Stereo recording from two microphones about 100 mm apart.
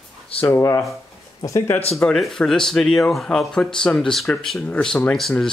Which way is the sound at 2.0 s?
5° left (ahead or behind).